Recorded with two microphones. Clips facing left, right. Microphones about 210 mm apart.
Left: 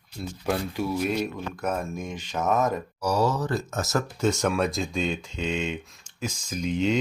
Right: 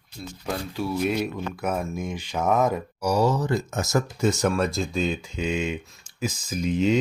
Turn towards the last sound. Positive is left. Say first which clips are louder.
# right 3 dB
turn(degrees=-5)  # may be behind; listen again after turning